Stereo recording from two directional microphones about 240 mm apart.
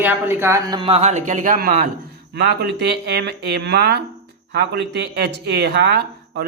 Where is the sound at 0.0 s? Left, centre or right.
Centre.